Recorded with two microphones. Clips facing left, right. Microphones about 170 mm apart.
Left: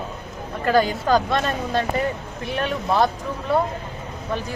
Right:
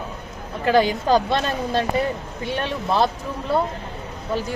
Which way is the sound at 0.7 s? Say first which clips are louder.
Right 1 dB; 30° right (ahead or behind).